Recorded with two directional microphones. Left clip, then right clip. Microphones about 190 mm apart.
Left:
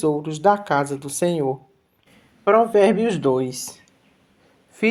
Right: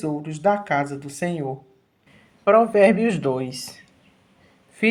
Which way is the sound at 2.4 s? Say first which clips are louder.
Even; 25° left (ahead or behind).